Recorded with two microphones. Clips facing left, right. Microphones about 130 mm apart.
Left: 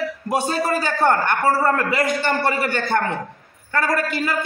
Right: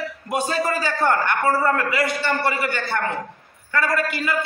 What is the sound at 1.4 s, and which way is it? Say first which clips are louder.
A man's voice: left 2 dB; 35° left (ahead or behind).